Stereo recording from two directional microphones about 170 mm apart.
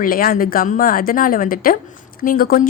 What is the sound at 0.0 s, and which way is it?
Speech, 60° left (ahead or behind).